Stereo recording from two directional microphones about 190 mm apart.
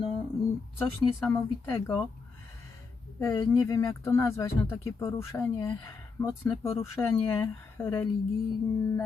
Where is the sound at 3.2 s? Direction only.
20° left (ahead or behind).